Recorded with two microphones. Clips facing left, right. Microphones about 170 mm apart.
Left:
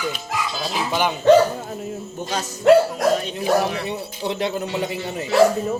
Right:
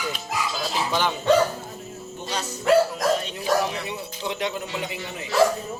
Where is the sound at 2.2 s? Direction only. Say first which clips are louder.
Left 5 dB; 45° left (ahead or behind).